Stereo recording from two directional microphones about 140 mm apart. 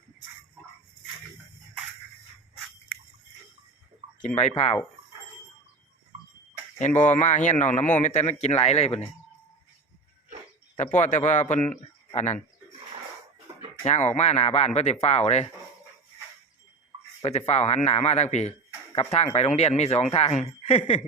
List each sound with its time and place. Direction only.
4.4 s speech: 50° left (ahead or behind)
7.1 s speech: 60° left (ahead or behind)
10.8 s speech: 60° left (ahead or behind)
13.8 s speech: 55° left (ahead or behind)
17.2 s speech: 50° left (ahead or behind)